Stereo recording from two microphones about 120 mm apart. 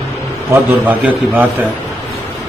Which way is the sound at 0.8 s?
15° right (ahead or behind).